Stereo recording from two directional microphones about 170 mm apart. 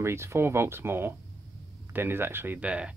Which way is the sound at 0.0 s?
15° right (ahead or behind).